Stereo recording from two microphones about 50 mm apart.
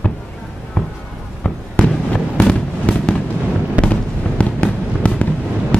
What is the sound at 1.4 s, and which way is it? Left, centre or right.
Fireworks, left.